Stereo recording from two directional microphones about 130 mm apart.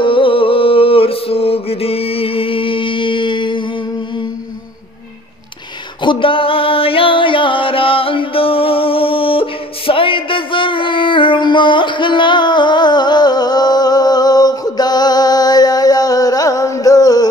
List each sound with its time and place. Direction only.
0.0 s mantra: 45° left (ahead or behind)
6.0 s music: 40° left (ahead or behind)